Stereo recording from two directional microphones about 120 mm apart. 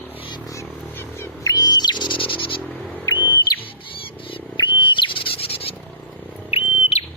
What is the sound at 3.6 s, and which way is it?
Wild animals, 45° left (ahead or behind).